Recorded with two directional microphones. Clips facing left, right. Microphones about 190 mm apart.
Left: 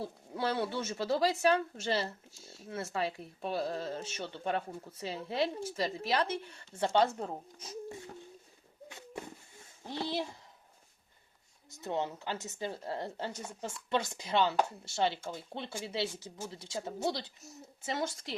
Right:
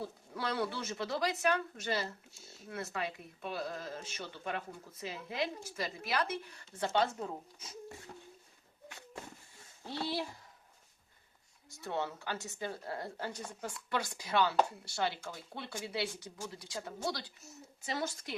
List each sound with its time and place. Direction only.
0.0 s a woman's voice: 25° left (ahead or behind)
9.8 s speech: 20° left (ahead or behind)
11.8 s a woman's voice: 20° left (ahead or behind)